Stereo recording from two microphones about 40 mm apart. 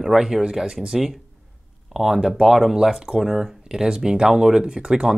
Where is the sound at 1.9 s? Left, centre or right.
Centre.